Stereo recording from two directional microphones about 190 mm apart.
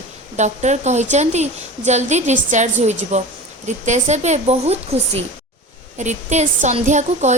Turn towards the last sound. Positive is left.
turn(degrees=-40)  # may be behind; listen again after turning